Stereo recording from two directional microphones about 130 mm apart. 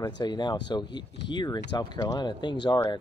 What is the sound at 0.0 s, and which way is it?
Speech, 35° left (ahead or behind).